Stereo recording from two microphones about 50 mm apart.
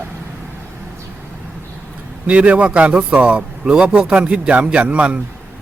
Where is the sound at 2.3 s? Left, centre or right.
Right.